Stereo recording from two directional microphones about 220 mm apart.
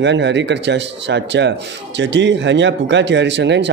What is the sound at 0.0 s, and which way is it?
A man's voice, 55° right (ahead or behind).